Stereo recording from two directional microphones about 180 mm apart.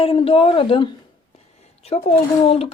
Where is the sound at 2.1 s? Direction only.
30° left (ahead or behind).